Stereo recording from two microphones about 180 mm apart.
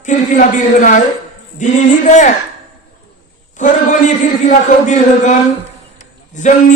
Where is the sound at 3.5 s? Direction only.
45° left (ahead or behind).